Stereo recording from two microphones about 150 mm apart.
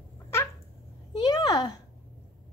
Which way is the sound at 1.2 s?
30° left (ahead or behind).